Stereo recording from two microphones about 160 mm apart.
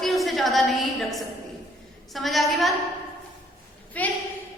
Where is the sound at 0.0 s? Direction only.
Centre (ahead or behind).